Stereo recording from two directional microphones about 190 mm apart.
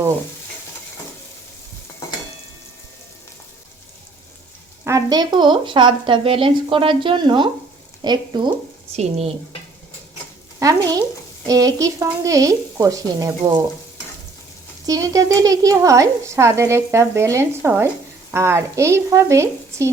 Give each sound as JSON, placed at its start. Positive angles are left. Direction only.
{"t": 4.8, "sound": "speech", "side_deg": -15}
{"t": 9.0, "sound": "speech", "side_deg": -35}
{"t": 10.6, "sound": "speech", "side_deg": -20}
{"t": 14.8, "sound": "speech", "side_deg": -20}